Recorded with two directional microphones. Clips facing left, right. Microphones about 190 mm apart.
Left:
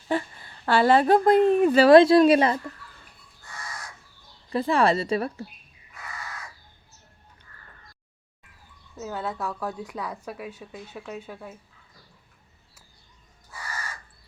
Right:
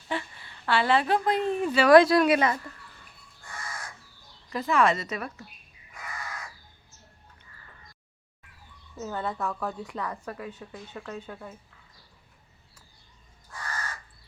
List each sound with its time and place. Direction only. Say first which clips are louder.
0.1 s a woman's voice: left 6 dB; 40° left (ahead or behind)
1.9 s speech: left 2 dB; 25° left (ahead or behind)
4.4 s a woman's voice: left 2 dB; 30° left (ahead or behind)
9.0 s a woman's voice: even; 5° left (ahead or behind)
13.5 s crow: even; 10° left (ahead or behind)